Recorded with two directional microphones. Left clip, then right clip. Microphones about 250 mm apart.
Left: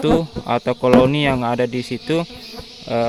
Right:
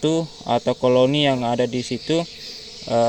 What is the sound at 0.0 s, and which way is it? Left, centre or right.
Speech, left.